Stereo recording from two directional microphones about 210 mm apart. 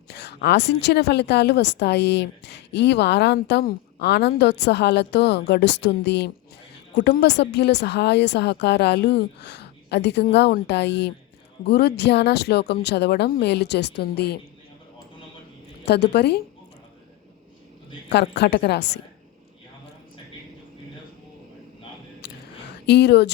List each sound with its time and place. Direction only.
0.1 s a woman's voice: 50° left (ahead or behind)
15.9 s a woman's voice: 50° left (ahead or behind)
18.1 s a woman's voice: 55° left (ahead or behind)
22.2 s a sound: 55° left (ahead or behind)